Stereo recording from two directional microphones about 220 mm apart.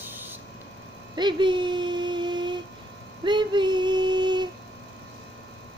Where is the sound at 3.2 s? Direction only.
20° right (ahead or behind).